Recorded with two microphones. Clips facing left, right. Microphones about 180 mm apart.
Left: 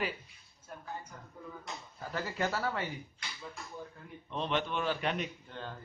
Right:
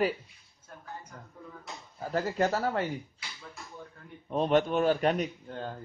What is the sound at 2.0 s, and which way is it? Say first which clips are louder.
Speech: right 7 dB; 40° right (ahead or behind).